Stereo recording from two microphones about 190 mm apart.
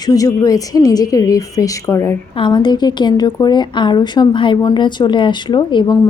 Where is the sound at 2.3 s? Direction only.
25° left (ahead or behind).